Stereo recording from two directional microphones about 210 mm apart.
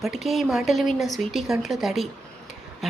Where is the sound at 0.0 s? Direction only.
Centre (ahead or behind).